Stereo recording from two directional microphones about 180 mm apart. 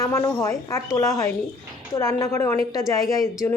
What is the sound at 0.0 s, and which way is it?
Speech, 15° left (ahead or behind).